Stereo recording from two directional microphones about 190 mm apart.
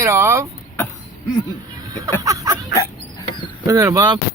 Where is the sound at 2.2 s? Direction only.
15° right (ahead or behind).